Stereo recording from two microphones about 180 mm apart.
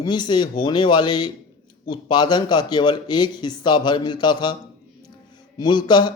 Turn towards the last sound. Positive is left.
turn(degrees=25)  # may be behind; listen again after turning